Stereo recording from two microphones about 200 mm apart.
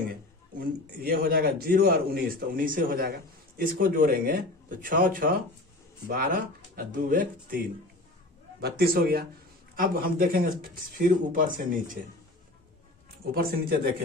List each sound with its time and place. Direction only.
0.1 s a man's voice: 50° right (ahead or behind)
13.3 s a man's voice: 50° right (ahead or behind)